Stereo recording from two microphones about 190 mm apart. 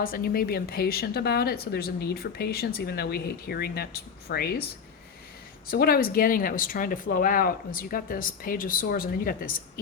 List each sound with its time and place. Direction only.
0.0 s speech: 50° left (ahead or behind)